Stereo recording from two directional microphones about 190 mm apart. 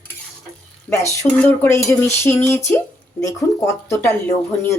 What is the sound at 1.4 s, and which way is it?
Speech, 15° left (ahead or behind).